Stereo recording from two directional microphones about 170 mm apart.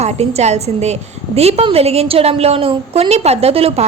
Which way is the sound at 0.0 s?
40° right (ahead or behind).